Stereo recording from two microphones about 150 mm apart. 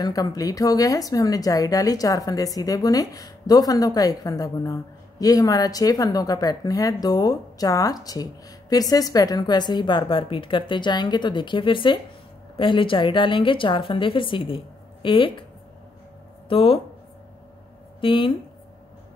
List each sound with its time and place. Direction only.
0.0 s a woman's voice: 25° left (ahead or behind)
16.4 s speech: 35° left (ahead or behind)
18.0 s a woman's voice: 35° left (ahead or behind)